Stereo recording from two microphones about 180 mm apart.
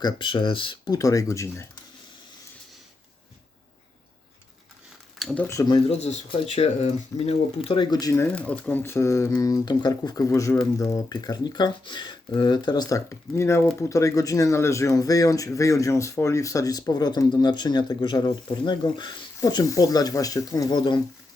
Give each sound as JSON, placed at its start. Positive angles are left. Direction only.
{"t": 0.0, "sound": "speech", "side_deg": 25}
{"t": 5.2, "sound": "speech", "side_deg": 10}
{"t": 6.0, "sound": "speech", "side_deg": 35}
{"t": 7.7, "sound": "speech", "side_deg": 25}